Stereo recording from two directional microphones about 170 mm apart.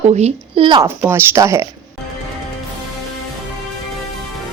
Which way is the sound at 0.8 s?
15° right (ahead or behind).